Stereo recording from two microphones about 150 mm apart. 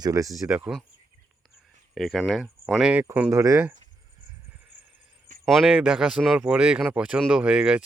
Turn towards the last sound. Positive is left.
turn(degrees=-5)  # may be behind; listen again after turning